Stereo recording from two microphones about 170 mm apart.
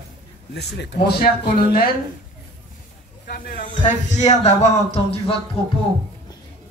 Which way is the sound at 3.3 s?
60° left (ahead or behind).